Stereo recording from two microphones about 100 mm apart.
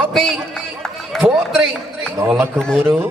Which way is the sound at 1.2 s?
25° right (ahead or behind).